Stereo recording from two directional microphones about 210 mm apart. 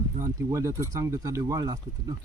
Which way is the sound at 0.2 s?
15° right (ahead or behind).